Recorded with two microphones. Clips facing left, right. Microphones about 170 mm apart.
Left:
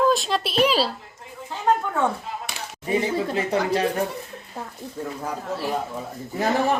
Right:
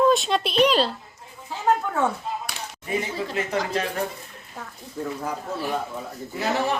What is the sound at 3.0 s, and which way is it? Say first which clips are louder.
Speech: left 4 dB; 30° left (ahead or behind).